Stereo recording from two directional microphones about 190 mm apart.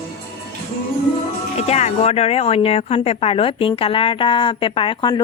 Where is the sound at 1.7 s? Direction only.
35° left (ahead or behind).